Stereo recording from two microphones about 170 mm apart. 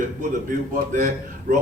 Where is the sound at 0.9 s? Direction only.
50° right (ahead or behind).